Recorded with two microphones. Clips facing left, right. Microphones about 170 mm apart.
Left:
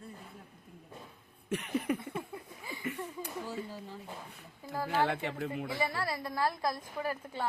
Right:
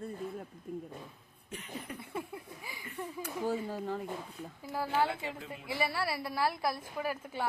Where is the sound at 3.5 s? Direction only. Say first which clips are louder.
Right 7 dB; 60° right (ahead or behind).